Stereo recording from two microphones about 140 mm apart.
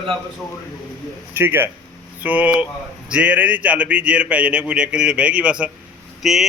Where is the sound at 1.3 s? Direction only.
15° right (ahead or behind).